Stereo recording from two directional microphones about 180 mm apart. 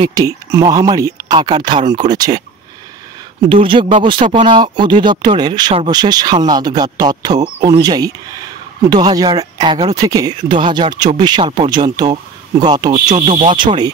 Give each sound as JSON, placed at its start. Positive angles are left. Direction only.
{"t": 0.0, "sound": "speech", "side_deg": -20}
{"t": 3.4, "sound": "speech", "side_deg": -30}
{"t": 13.1, "sound": "speech", "side_deg": -35}